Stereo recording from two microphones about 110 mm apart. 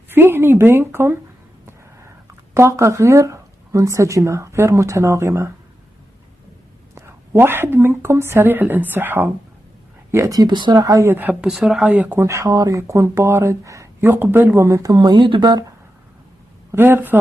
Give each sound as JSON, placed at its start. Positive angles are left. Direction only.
{"t": 0.1, "sound": "a woman's voice", "side_deg": -20}
{"t": 7.0, "sound": "a woman's voice", "side_deg": -20}
{"t": 10.1, "sound": "speech", "side_deg": -30}
{"t": 11.1, "sound": "speech", "side_deg": -15}
{"t": 11.4, "sound": "speech", "side_deg": -5}
{"t": 11.9, "sound": "speech", "side_deg": -15}
{"t": 12.2, "sound": "a woman's voice", "side_deg": -30}
{"t": 16.7, "sound": "a woman's voice", "side_deg": -20}